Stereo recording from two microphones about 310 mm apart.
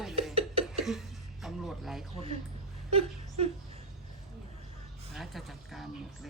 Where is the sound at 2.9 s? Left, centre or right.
Centre.